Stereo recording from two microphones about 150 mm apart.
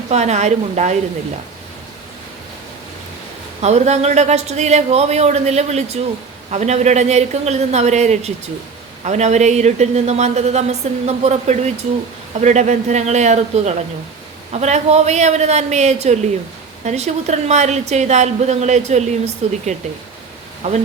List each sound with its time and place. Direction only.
0.1 s a woman's voice: 50° right (ahead or behind)
3.6 s a woman's voice: 50° right (ahead or behind)